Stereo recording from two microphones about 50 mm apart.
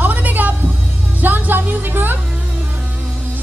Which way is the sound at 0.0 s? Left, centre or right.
Right.